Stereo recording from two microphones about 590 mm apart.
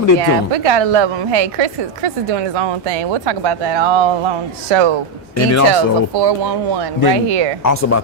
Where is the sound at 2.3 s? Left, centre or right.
Right.